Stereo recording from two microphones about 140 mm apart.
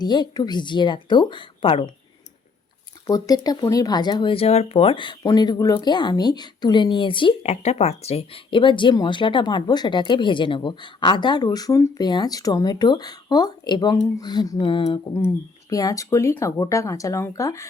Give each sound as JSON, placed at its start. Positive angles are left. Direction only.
{"t": 0.0, "sound": "speech", "side_deg": 30}
{"t": 3.1, "sound": "speech", "side_deg": 25}
{"t": 7.5, "sound": "speech", "side_deg": 50}
{"t": 15.7, "sound": "speech", "side_deg": 25}